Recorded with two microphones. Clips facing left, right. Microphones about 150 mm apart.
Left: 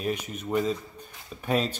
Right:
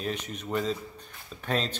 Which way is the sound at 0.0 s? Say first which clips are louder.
Left 3 dB; 10° left (ahead or behind).